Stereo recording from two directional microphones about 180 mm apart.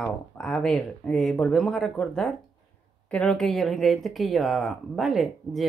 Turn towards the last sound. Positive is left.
turn(degrees=0)  # may be behind; listen again after turning